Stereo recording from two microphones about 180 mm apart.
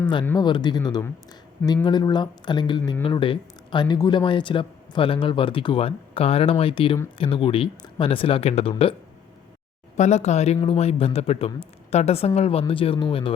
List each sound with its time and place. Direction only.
0.3 s speech: 25° left (ahead or behind)
10.0 s speech: 40° left (ahead or behind)